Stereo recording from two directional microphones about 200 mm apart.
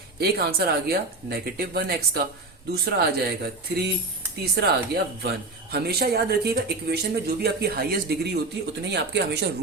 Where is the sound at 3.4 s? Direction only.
50° right (ahead or behind).